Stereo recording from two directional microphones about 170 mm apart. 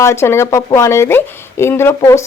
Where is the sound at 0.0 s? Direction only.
15° left (ahead or behind).